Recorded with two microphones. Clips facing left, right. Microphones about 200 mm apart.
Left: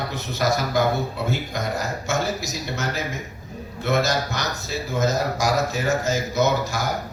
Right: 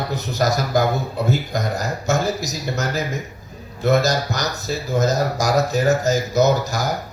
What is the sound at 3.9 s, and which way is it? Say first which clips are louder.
Speech: right 4 dB; 40° right (ahead or behind).